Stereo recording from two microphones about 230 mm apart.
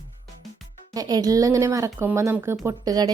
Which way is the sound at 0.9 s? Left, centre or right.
Centre.